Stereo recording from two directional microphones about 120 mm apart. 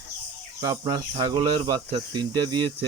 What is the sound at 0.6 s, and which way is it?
Speech, 30° right (ahead or behind).